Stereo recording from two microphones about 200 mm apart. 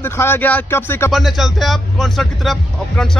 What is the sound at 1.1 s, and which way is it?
Speech, centre (ahead or behind).